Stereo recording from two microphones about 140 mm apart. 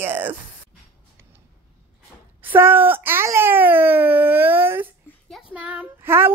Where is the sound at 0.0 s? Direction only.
15° right (ahead or behind).